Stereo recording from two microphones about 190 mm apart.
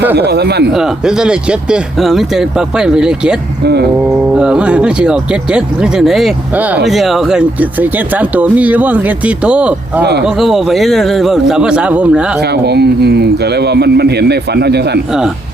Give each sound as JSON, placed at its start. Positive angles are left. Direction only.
{"t": 0.2, "sound": "speech", "side_deg": -60}
{"t": 0.7, "sound": "speech", "side_deg": 0}
{"t": 10.0, "sound": "speech", "side_deg": -60}
{"t": 10.2, "sound": "speech", "side_deg": 0}
{"t": 12.4, "sound": "speech", "side_deg": -60}